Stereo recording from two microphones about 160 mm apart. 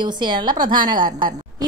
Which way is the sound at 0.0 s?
30° right (ahead or behind).